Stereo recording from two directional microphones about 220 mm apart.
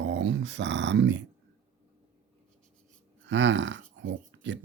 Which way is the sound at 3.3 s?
55° right (ahead or behind).